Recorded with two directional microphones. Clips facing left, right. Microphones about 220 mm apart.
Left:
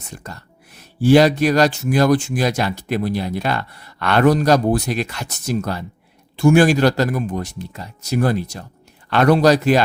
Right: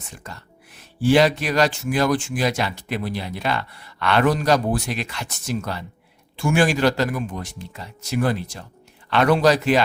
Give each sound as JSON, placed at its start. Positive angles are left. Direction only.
{"t": 0.2, "sound": "speech", "side_deg": 40}